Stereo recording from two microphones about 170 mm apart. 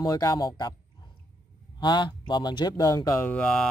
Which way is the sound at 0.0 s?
20° left (ahead or behind).